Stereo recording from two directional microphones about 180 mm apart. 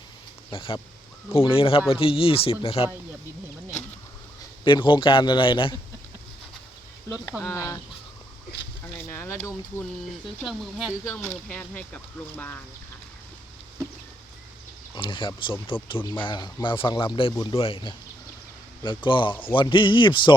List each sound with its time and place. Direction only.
0.5 s speech: 30° left (ahead or behind)
4.6 s speech: 25° left (ahead or behind)
7.4 s speech: 15° left (ahead or behind)
9.0 s speech: 15° left (ahead or behind)
10.4 s speech: centre (ahead or behind)
11.1 s speech: 10° left (ahead or behind)
14.9 s speech: 25° left (ahead or behind)
17.3 s speech: 20° left (ahead or behind)